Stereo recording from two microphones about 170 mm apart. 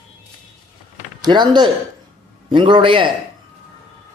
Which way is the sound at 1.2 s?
25° right (ahead or behind).